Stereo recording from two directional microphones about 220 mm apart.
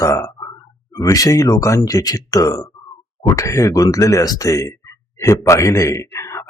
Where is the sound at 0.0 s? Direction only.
15° left (ahead or behind).